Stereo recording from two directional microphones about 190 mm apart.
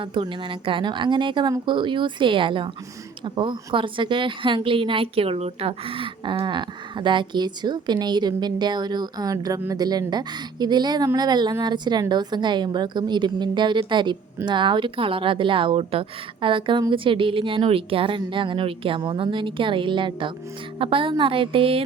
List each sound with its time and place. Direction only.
0.0 s a woman's voice: 25° right (ahead or behind)